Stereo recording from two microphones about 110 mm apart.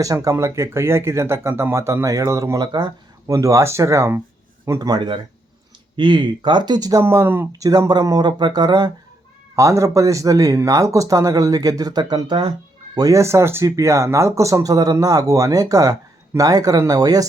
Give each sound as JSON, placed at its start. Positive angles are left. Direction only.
{"t": 0.0, "sound": "speech", "side_deg": -30}
{"t": 4.8, "sound": "speech", "side_deg": -40}
{"t": 7.0, "sound": "speech", "side_deg": -25}
{"t": 7.6, "sound": "speech", "side_deg": -35}
{"t": 9.6, "sound": "speech", "side_deg": -30}
{"t": 13.0, "sound": "speech", "side_deg": -30}